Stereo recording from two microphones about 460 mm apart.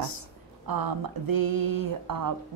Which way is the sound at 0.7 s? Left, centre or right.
Right.